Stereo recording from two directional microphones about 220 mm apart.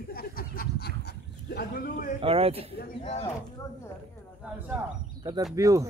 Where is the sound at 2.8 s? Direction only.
30° left (ahead or behind).